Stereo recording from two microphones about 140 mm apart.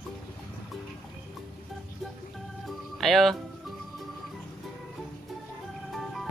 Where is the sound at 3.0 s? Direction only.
Centre (ahead or behind).